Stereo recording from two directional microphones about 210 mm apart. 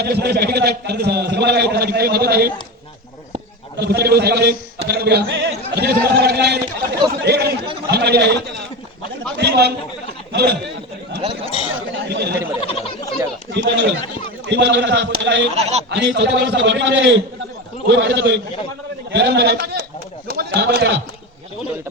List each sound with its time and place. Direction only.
0.0 s a man's voice: 50° right (ahead or behind)
3.8 s a man's voice: 50° right (ahead or behind)
9.4 s a man's voice: 50° right (ahead or behind)
11.7 s chatter: 55° right (ahead or behind)
12.5 s a sound: 25° left (ahead or behind)
13.5 s a man's voice: 60° right (ahead or behind)
15.5 s speech: 30° right (ahead or behind)
15.9 s a man's voice: 55° right (ahead or behind)